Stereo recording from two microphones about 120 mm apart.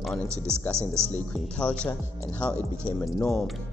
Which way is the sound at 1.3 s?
10° left (ahead or behind).